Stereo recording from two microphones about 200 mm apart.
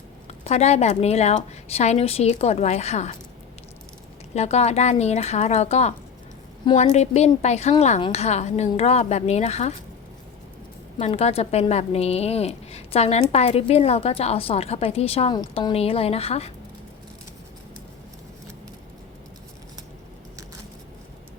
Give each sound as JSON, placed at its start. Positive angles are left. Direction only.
{"t": 0.3, "sound": "a woman's voice", "side_deg": 30}
{"t": 4.4, "sound": "a woman's voice", "side_deg": 30}
{"t": 10.9, "sound": "a woman's voice", "side_deg": 30}